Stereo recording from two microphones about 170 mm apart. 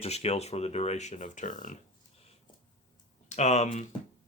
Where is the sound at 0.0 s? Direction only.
40° left (ahead or behind).